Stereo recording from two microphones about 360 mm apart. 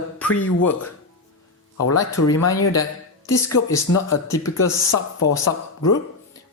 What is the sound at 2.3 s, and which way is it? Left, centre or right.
Speech, left.